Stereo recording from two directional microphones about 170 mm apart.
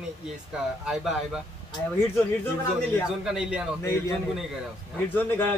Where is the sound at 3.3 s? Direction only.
5° right (ahead or behind).